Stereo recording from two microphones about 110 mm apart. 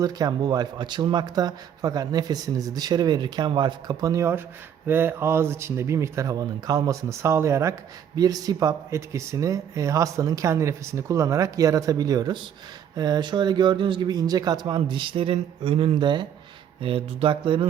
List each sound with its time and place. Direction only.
0.0 s speech: 35° right (ahead or behind)
16.8 s speech: 55° right (ahead or behind)